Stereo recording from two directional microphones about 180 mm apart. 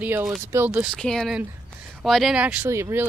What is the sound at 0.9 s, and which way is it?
Speech, centre (ahead or behind).